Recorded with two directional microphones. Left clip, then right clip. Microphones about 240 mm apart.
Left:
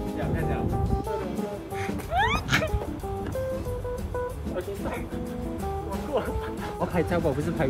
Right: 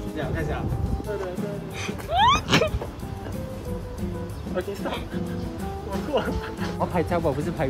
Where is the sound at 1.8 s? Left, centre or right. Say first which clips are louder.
Right 6 dB; centre.